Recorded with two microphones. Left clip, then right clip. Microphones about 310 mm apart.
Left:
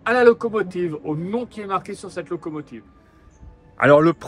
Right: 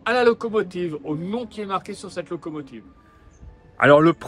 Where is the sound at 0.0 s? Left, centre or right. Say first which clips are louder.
Left 3 dB; centre.